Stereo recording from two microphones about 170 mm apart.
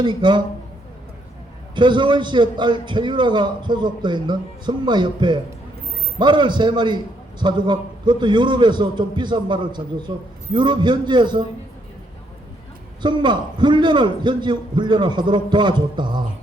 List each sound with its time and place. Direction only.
0.0 s a man's voice: 25° right (ahead or behind)
1.7 s a man's voice: 25° right (ahead or behind)
13.0 s a man's voice: 25° right (ahead or behind)